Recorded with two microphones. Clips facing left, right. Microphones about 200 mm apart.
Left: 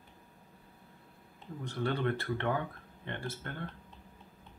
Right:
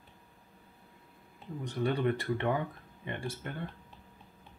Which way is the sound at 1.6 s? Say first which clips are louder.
Right 2 dB; 15° right (ahead or behind).